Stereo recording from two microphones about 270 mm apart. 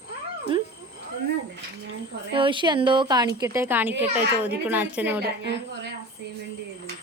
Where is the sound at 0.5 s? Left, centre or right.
Centre.